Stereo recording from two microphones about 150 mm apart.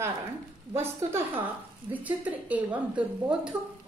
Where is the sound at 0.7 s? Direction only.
15° right (ahead or behind).